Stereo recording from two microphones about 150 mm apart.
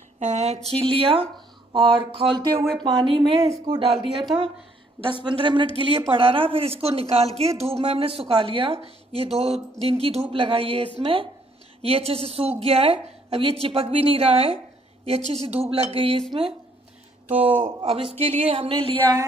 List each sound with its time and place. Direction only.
0.2 s a woman's voice: 50° right (ahead or behind)
0.7 s a woman's voice: 35° right (ahead or behind)
5.3 s a woman's voice: 35° right (ahead or behind)
17.5 s a woman's voice: 50° right (ahead or behind)
17.7 s a woman's voice: 35° right (ahead or behind)